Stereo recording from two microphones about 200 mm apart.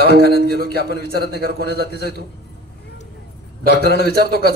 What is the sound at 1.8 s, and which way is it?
Speech, 55° left (ahead or behind).